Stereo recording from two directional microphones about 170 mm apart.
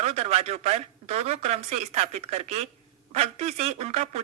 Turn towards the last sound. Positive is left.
turn(degrees=-40)  # may be behind; listen again after turning